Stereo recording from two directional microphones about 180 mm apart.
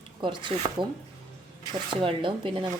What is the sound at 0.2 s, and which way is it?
Speech, 25° right (ahead or behind).